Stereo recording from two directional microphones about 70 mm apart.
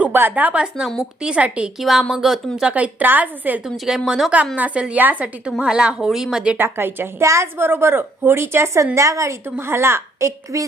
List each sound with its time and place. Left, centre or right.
0.0 s a woman's voice: right
1.8 s speech: centre
2.6 s a woman's voice: centre
3.8 s speech: centre
4.5 s a woman's voice: centre
6.6 s speech: right
7.6 s a woman's voice: right
9.6 s speech: right